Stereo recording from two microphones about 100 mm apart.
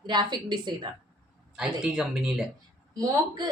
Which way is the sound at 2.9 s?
40° right (ahead or behind).